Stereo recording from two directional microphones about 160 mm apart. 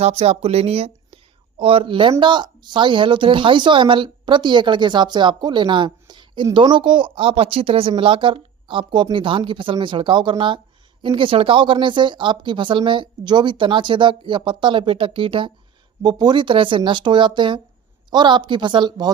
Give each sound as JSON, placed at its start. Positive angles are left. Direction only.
{"t": 0.0, "sound": "speech", "side_deg": -40}